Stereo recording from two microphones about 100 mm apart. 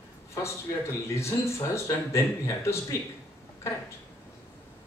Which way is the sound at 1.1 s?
30° left (ahead or behind).